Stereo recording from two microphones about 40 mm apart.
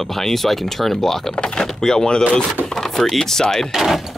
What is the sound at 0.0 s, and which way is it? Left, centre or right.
Speech, centre.